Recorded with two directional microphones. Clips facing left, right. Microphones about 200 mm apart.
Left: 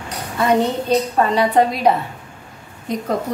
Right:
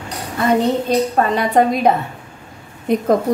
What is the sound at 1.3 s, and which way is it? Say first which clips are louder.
Speech: left 1 dB; 50° right (ahead or behind).